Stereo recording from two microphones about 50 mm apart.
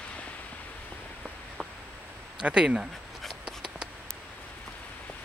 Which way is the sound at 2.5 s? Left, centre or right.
Centre.